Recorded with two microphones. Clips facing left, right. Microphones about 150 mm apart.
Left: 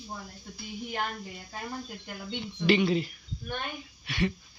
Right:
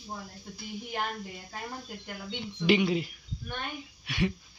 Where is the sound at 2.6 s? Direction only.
15° right (ahead or behind).